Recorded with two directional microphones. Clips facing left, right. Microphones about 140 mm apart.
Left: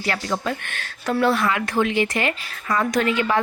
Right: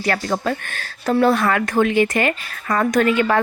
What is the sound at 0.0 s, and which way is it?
Speech, 45° right (ahead or behind).